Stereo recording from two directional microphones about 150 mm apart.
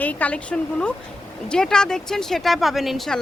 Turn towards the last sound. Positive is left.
turn(degrees=0)  # may be behind; listen again after turning